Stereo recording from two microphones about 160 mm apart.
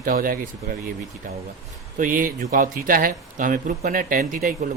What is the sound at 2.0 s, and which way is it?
Speech, 60° right (ahead or behind).